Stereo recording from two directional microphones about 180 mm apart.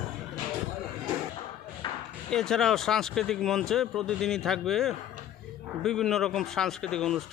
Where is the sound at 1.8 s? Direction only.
25° left (ahead or behind).